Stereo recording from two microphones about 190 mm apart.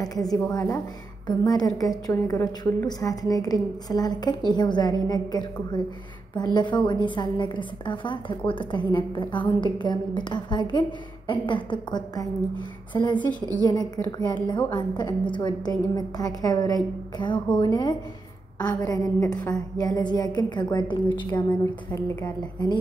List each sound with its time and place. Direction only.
0.0 s a woman's voice: 20° left (ahead or behind)